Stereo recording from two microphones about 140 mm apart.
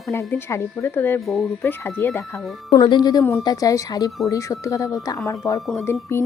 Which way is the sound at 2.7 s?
30° left (ahead or behind).